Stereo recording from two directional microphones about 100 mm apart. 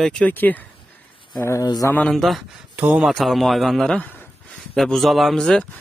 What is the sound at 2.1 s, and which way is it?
Speech, centre (ahead or behind).